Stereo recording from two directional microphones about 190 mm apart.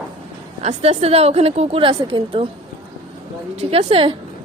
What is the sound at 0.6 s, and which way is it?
A woman's voice, 35° right (ahead or behind).